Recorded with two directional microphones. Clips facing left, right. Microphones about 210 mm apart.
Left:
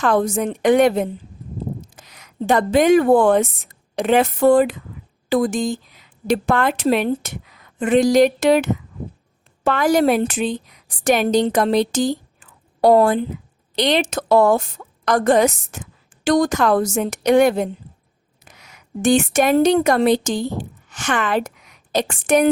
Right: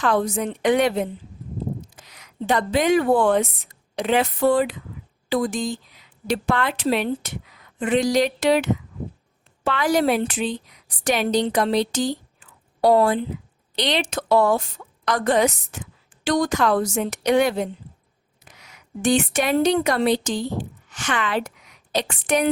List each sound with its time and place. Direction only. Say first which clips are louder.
0.0 s a woman's voice: left 3 dB; 45° left (ahead or behind)